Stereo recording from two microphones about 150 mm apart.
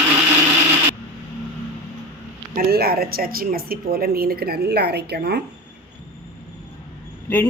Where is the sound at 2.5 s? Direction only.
90° right.